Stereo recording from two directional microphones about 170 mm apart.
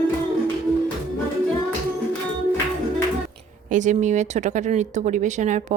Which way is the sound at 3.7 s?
45° right (ahead or behind).